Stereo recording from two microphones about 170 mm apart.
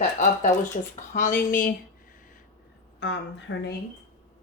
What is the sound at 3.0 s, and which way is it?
Speech, 90° left.